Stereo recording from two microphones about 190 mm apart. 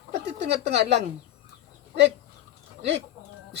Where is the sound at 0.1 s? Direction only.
65° right (ahead or behind).